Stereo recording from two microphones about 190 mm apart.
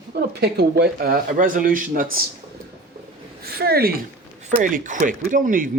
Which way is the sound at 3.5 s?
55° right (ahead or behind).